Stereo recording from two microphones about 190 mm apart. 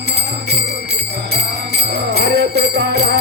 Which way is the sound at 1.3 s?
60° right (ahead or behind).